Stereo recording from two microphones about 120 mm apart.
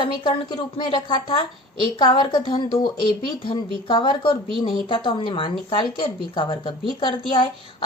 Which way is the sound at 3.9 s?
40° left (ahead or behind).